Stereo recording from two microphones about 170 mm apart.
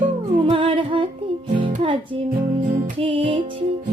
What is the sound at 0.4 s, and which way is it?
Music, 30° right (ahead or behind).